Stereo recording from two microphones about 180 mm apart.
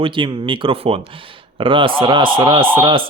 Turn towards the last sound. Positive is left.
turn(degrees=-30)  # may be behind; listen again after turning